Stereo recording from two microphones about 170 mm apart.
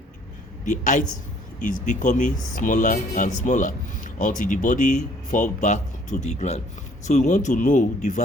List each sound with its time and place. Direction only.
0.6 s a woman's voice: 45° left (ahead or behind)